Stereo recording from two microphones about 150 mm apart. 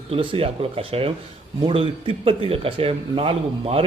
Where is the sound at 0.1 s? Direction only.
35° right (ahead or behind).